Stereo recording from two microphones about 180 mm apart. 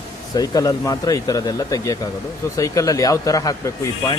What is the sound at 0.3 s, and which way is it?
Speech, 20° left (ahead or behind).